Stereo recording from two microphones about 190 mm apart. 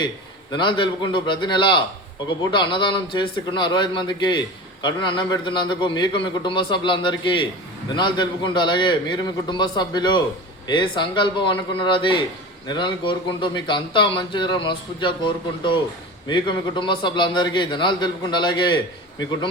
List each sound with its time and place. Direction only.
0.5 s a man's voice: 25° left (ahead or behind)